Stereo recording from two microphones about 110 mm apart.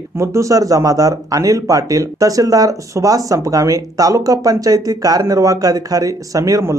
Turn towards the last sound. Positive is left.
turn(degrees=-30)  # may be behind; listen again after turning